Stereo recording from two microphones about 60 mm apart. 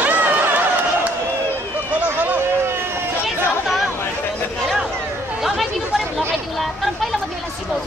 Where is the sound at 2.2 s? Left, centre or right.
Right.